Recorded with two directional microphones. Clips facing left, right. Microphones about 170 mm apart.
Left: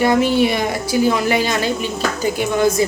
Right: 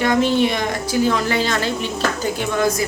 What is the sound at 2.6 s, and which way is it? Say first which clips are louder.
Speech: left 5 dB; 25° left (ahead or behind).